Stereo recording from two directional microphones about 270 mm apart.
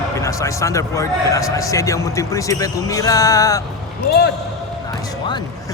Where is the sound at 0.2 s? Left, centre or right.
Centre.